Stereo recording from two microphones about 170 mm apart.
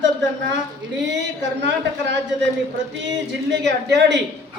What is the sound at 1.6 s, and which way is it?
Speech, 90° right.